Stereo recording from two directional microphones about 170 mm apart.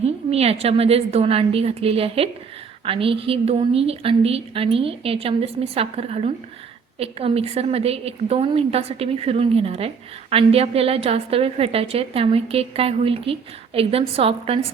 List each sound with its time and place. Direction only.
0.0 s a woman's voice: 35° right (ahead or behind)